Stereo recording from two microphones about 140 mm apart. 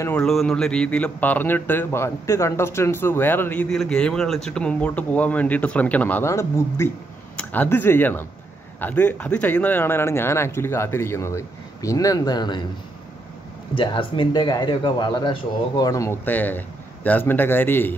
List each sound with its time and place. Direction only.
0.2 s a man's voice: 5° left (ahead or behind); by 12.6 s 30° left (ahead or behind)
13.7 s a man's voice: 35° left (ahead or behind); by 17.9 s 15° left (ahead or behind)